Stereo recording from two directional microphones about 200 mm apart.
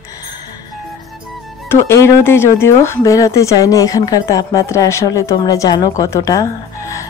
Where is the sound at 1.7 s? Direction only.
10° left (ahead or behind).